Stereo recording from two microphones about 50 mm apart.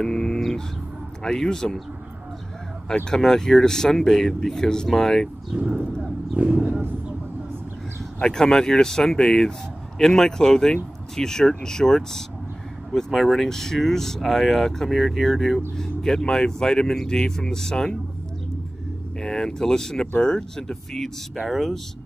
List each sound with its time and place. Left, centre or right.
0.0 s speech: centre
3.1 s speech: centre
5.5 s speech: right
8.2 s speech: centre
19.1 s speech: centre